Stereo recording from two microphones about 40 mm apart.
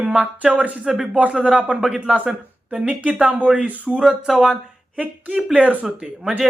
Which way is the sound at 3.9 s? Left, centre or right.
Centre.